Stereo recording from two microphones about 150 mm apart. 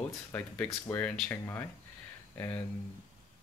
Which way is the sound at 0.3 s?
10° left (ahead or behind).